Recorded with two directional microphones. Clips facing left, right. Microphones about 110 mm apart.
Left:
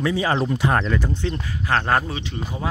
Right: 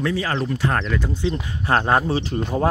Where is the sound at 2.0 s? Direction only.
35° right (ahead or behind).